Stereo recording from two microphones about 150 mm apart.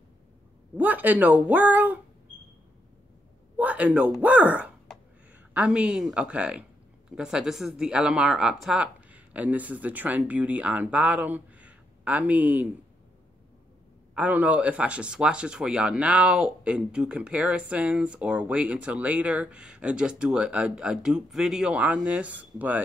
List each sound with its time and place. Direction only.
0.7 s speech: 10° right (ahead or behind)
3.5 s speech: 10° right (ahead or behind)
14.1 s speech: 10° right (ahead or behind)